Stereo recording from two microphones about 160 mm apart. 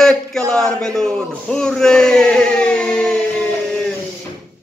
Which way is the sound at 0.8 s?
5° left (ahead or behind).